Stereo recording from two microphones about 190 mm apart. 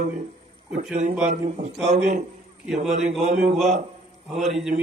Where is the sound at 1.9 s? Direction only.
40° right (ahead or behind).